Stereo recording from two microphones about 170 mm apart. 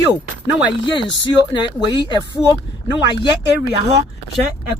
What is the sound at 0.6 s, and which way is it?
Speech, 30° left (ahead or behind).